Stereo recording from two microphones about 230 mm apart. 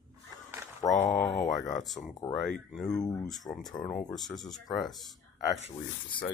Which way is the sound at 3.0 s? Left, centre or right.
Centre.